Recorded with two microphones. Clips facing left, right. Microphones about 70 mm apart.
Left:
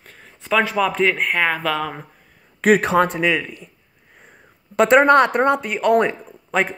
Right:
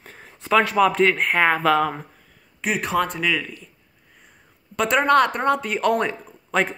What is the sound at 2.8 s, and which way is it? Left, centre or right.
Speech, left.